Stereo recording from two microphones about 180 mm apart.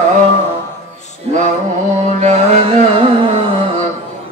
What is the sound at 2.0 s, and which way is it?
Carnatic music, 40° right (ahead or behind).